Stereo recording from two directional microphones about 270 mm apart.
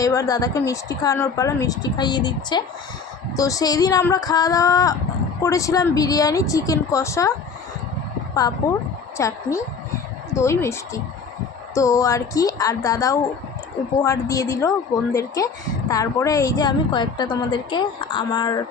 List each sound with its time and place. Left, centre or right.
0.0 s a woman's voice: centre
9.1 s a woman's voice: centre